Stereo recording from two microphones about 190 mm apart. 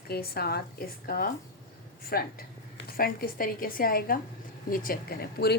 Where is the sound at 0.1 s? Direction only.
55° left (ahead or behind).